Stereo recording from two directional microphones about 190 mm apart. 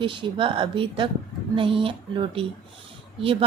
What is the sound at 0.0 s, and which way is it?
A woman's voice, 25° right (ahead or behind).